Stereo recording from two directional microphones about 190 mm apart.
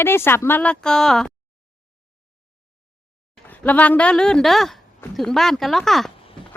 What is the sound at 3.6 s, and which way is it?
Speech, 10° left (ahead or behind).